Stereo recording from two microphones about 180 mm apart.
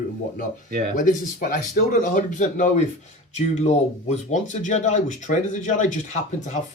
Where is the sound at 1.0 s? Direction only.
45° left (ahead or behind).